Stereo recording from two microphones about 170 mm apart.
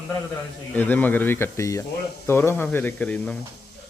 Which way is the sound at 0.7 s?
10° left (ahead or behind).